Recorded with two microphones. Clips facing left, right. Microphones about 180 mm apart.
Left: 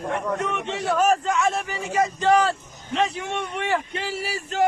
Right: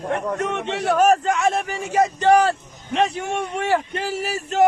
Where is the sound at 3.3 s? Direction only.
45° right (ahead or behind).